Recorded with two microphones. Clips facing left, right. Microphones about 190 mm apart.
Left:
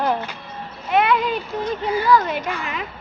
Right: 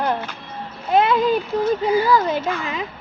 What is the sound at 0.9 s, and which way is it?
Speech, 30° right (ahead or behind).